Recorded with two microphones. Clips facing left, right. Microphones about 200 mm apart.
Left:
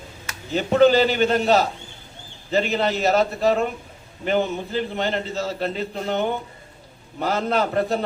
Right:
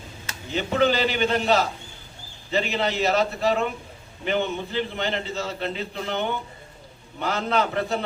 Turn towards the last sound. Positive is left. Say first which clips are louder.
# left 3 dB
turn(degrees=40)  # may be behind; listen again after turning